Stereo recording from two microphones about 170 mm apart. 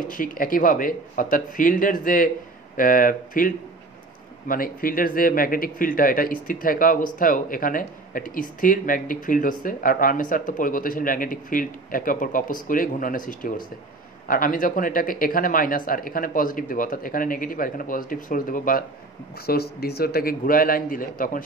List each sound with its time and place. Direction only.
0.0 s speech: 55° left (ahead or behind)
19.3 s speech: 65° left (ahead or behind)